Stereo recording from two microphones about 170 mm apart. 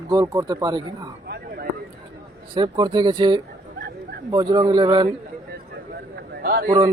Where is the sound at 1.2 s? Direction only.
70° right (ahead or behind).